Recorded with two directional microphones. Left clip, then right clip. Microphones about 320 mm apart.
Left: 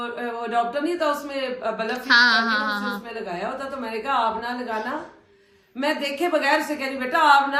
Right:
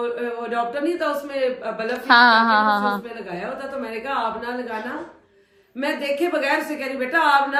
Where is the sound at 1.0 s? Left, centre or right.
Centre.